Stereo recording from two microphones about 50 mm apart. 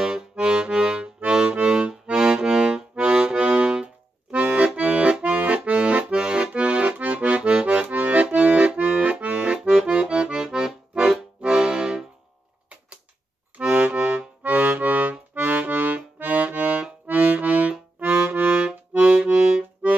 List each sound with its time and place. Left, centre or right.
0.0 s accordion: centre
13.6 s accordion: right